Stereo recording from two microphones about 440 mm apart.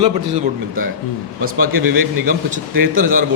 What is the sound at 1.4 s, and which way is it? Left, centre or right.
A man's voice, centre.